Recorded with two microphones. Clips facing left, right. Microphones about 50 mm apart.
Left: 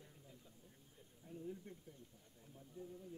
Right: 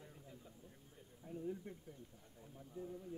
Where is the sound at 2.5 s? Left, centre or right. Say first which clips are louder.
Right 4 dB; right.